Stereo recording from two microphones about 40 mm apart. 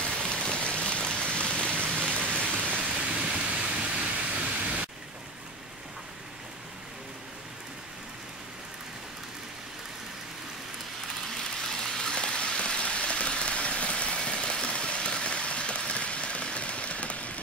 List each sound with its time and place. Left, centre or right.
0.3 s rain: left
2.5 s pink noise: right
3.0 s rain: right
3.3 s pink noise: right
11.7 s rain: centre; by 17.3 s left